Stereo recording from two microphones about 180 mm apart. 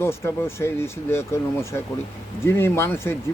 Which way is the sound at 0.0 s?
15° left (ahead or behind).